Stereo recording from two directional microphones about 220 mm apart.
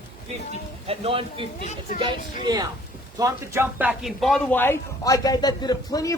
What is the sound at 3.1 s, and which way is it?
A man's voice, 15° right (ahead or behind).